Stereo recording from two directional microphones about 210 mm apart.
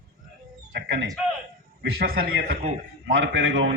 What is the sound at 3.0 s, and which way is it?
Speech, 55° right (ahead or behind).